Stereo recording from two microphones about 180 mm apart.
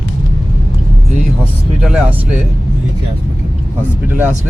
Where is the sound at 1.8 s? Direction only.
5° right (ahead or behind).